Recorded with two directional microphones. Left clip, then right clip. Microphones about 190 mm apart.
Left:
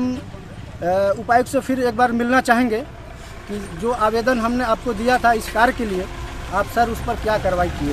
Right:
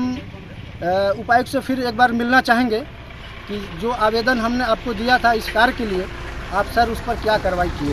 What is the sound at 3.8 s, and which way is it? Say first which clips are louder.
Speech: even; 10° left (ahead or behind).